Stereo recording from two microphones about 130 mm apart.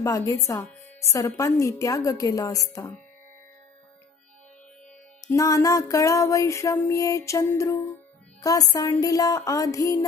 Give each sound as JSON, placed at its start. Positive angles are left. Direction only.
{"t": 0.0, "sound": "music", "side_deg": 25}
{"t": 5.2, "sound": "music", "side_deg": 25}